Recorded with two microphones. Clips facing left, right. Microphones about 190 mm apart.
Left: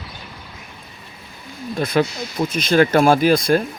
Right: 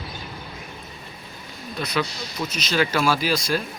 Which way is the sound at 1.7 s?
50° left (ahead or behind).